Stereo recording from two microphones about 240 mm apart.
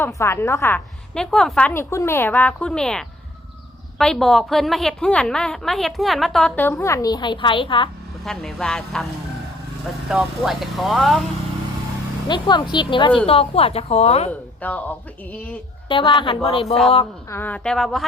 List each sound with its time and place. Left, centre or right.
0.0 s a woman's voice: centre
8.2 s a woman's voice: centre
10.1 s a woman's voice: centre
12.3 s a woman's voice: centre
14.3 s a woman's voice: centre
15.9 s a woman's voice: left
17.2 s a woman's voice: centre